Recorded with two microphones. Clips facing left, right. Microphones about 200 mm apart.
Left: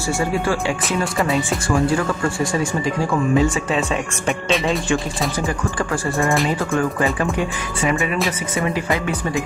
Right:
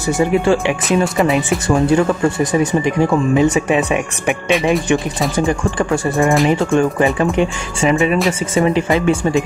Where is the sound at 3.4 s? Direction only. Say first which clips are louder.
Right 5 dB; 20° right (ahead or behind).